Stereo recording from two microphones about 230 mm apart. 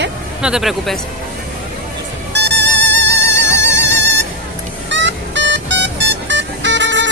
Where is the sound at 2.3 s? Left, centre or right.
Right.